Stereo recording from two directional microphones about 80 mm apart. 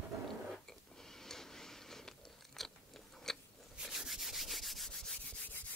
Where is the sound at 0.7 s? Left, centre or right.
Centre.